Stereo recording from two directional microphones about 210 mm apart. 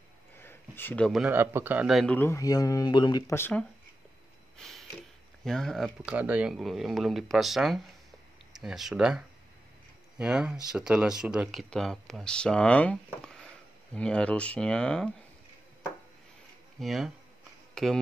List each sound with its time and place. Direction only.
0.4 s a sound: 10° left (ahead or behind)
1.3 s a man's voice: 10° right (ahead or behind)
2.1 s speech: 15° left (ahead or behind)
4.6 s a sound: centre (ahead or behind)
5.4 s speech: centre (ahead or behind)
16.8 s speech: centre (ahead or behind)